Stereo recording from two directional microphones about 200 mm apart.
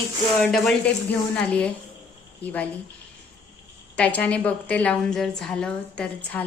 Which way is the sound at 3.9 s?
5° left (ahead or behind).